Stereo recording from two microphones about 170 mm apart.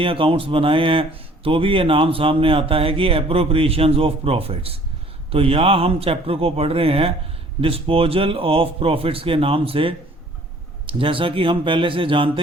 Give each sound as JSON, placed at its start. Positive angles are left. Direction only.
{"t": 0.0, "sound": "speech", "side_deg": -30}